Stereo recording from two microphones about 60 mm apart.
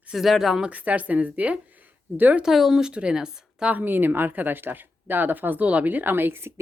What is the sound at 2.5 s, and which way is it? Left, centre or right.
Speech, centre.